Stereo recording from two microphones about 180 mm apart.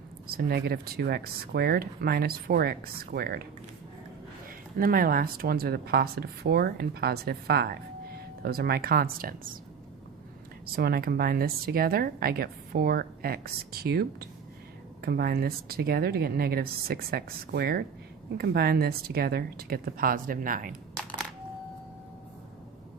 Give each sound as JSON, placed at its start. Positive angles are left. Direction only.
{"t": 0.3, "sound": "speech", "side_deg": -60}
{"t": 4.4, "sound": "speech", "side_deg": -55}
{"t": 10.7, "sound": "speech", "side_deg": -60}